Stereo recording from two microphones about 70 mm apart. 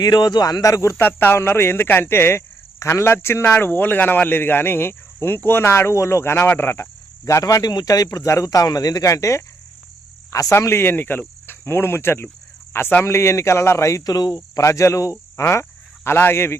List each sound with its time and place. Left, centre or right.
0.0 s speech: left
0.6 s speech: left
1.0 s speech: left
7.3 s speech: left
13.1 s speech: left
14.0 s speech: left
14.6 s speech: left